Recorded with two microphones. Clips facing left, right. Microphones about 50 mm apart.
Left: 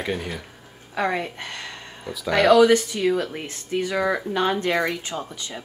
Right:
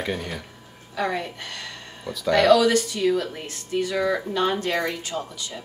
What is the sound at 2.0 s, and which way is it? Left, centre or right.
Speech, centre.